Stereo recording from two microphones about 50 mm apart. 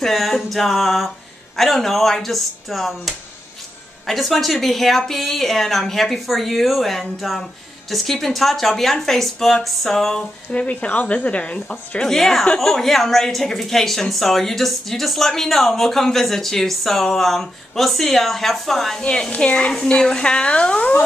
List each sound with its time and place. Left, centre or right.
0.0 s a woman's voice: centre
10.5 s speech: left
12.0 s a woman's voice: centre
18.9 s speech: centre